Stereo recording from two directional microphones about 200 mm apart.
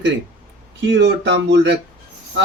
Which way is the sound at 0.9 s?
65° right (ahead or behind).